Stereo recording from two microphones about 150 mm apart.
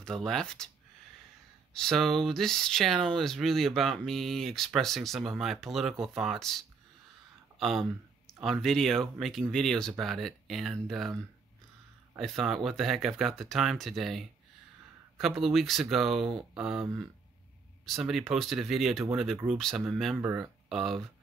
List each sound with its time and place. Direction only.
0.0 s speech: 5° left (ahead or behind)
1.8 s speech: centre (ahead or behind)
12.2 s speech: centre (ahead or behind)
16.8 s speech: 25° right (ahead or behind)
17.8 s speech: centre (ahead or behind)